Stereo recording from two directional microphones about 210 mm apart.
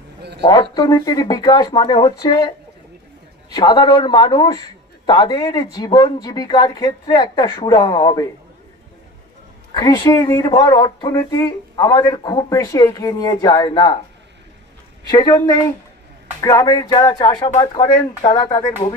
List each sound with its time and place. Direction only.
0.4 s speech: 20° left (ahead or behind)
3.5 s speech: 20° left (ahead or behind)
9.8 s speech: 20° left (ahead or behind)
15.0 s speech: 20° left (ahead or behind)